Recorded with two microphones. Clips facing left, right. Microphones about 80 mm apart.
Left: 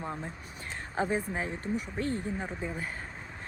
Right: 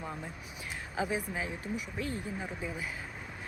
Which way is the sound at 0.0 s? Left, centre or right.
Centre.